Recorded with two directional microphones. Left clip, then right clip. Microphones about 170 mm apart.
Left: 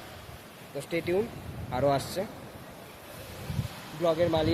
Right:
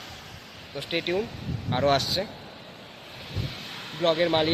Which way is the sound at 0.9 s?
5° left (ahead or behind).